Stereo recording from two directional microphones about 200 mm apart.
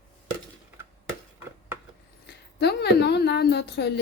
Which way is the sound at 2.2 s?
55° left (ahead or behind).